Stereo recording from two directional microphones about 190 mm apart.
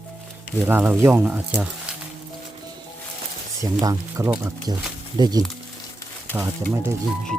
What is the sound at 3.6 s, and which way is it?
Speech, 15° right (ahead or behind).